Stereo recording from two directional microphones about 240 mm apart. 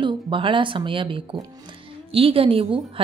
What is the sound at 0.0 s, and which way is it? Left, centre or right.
A woman's voice, right.